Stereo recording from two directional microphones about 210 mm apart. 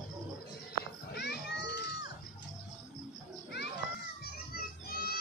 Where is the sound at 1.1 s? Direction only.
55° left (ahead or behind).